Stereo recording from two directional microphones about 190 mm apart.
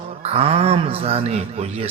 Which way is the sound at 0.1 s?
30° right (ahead or behind).